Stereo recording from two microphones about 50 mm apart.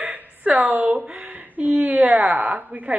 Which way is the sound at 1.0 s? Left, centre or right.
Centre.